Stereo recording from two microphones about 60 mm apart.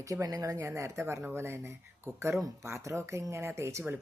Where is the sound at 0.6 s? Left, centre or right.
Right.